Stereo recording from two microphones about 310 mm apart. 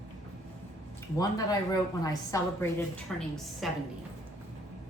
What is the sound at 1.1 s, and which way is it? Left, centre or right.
A woman's voice, centre.